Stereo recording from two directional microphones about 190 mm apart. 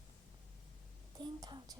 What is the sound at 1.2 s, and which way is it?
Whispering, 20° right (ahead or behind).